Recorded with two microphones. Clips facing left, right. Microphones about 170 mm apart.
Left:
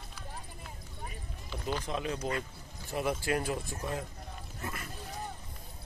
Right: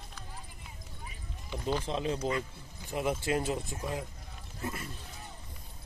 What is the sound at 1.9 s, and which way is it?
Speech, 25° right (ahead or behind).